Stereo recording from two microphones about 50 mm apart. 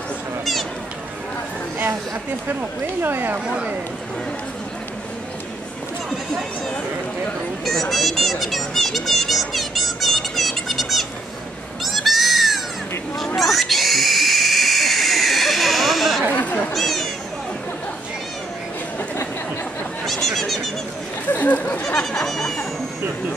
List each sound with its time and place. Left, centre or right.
3.0 s speech: right
7.6 s a sound: centre
16.3 s chatter: left
16.7 s cat: centre
20.1 s a sound: centre
21.3 s speech: left
21.8 s speech: centre